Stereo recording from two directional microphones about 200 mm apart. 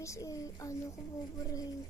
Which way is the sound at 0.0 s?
15° left (ahead or behind).